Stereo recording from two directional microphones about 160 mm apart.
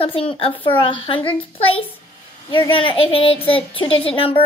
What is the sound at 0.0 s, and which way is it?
A child's voice, 35° left (ahead or behind).